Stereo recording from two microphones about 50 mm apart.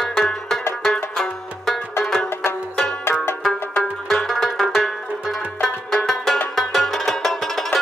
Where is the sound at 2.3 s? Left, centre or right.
Left.